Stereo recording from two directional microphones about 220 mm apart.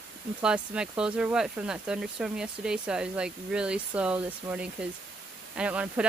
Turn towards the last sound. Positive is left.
turn(degrees=-5)  # may be behind; listen again after turning